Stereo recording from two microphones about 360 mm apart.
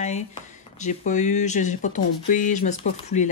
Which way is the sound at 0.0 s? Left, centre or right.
Centre.